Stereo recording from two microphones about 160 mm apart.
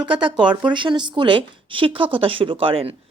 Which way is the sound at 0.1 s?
30° right (ahead or behind).